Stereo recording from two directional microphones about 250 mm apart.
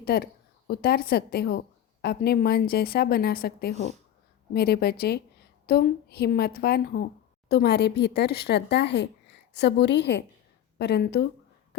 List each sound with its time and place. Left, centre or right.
0.0 s a woman's voice: left